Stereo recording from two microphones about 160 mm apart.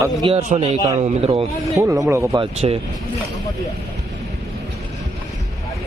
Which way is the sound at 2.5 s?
40° right (ahead or behind).